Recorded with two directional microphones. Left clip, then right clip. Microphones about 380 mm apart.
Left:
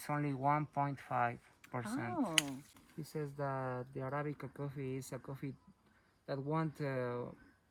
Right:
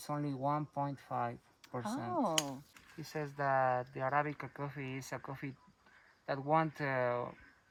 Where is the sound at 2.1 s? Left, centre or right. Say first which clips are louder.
Right 1 dB; right.